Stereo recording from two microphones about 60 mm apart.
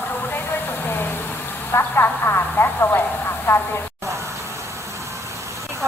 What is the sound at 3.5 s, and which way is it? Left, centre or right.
Speech, left.